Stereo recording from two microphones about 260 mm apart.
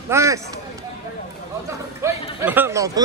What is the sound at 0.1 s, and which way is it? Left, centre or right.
Speech, centre.